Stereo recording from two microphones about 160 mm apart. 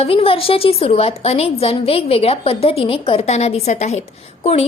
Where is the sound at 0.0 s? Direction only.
35° left (ahead or behind).